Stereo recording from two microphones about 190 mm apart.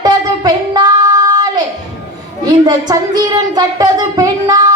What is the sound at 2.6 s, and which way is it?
Speech, 20° right (ahead or behind).